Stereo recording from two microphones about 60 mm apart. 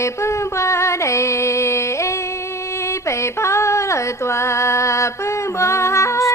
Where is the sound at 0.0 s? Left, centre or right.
Left.